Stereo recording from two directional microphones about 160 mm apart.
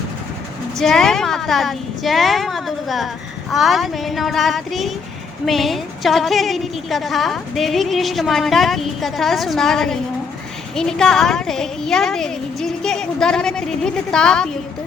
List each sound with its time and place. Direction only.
0.8 s a woman's voice: centre (ahead or behind)